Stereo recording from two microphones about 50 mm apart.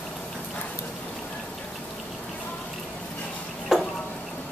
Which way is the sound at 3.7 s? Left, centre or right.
Centre.